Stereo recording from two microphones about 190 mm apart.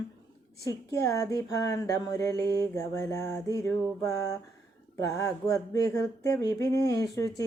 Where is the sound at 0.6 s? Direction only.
15° left (ahead or behind).